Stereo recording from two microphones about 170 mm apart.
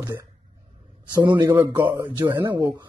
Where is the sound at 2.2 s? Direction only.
10° right (ahead or behind).